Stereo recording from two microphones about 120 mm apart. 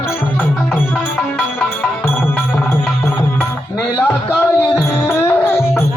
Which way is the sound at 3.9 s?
25° left (ahead or behind).